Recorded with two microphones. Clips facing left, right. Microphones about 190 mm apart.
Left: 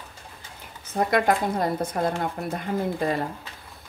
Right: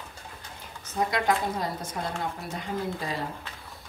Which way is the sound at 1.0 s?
55° left (ahead or behind).